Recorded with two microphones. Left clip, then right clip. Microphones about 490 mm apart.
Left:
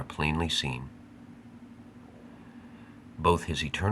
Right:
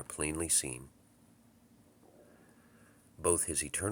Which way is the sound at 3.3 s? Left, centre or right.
Right.